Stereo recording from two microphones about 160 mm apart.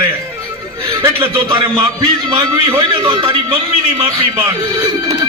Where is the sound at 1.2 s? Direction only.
30° right (ahead or behind).